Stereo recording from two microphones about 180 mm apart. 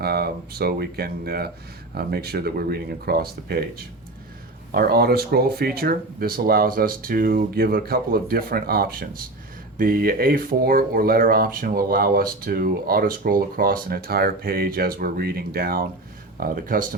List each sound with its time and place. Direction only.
0.0 s speech: 60° right (ahead or behind)
4.7 s speech: 60° right (ahead or behind)